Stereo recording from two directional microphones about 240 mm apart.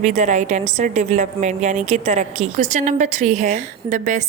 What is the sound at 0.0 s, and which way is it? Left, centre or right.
A woman's voice, right.